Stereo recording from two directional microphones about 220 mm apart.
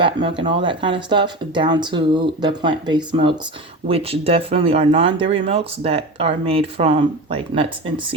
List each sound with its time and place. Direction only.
0.0 s speech: 20° right (ahead or behind)